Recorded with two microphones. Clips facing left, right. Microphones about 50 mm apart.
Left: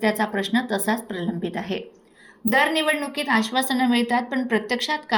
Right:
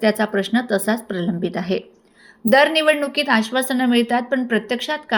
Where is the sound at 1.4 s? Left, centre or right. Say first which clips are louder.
Right 6 dB; right.